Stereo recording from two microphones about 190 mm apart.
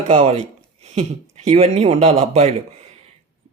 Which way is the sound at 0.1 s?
35° right (ahead or behind).